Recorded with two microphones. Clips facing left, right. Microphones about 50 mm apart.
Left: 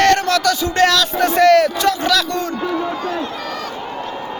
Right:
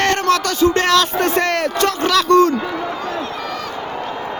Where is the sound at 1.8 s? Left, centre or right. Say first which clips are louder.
Even; right.